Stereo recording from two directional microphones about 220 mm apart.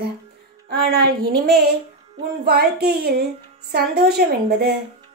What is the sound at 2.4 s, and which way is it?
A woman's voice, 45° right (ahead or behind).